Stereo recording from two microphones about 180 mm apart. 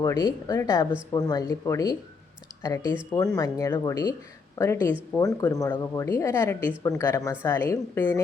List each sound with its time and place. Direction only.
0.0 s speech: 15° left (ahead or behind)